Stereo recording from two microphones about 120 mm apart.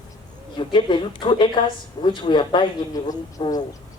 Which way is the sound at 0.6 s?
40° left (ahead or behind).